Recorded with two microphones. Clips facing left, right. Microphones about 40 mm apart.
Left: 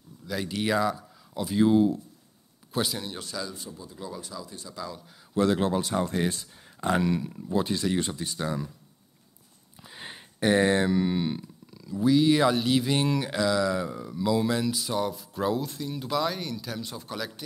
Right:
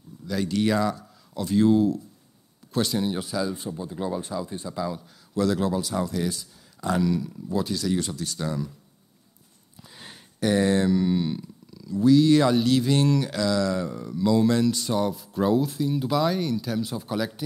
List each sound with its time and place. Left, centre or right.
0.3 s speech: centre
3.0 s speech: centre
3.5 s speech: right
4.7 s speech: centre
5.3 s speech: left
9.8 s speech: left; by 17.3 s centre